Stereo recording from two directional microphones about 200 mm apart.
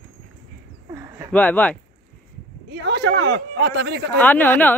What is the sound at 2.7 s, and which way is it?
Speech, 60° right (ahead or behind).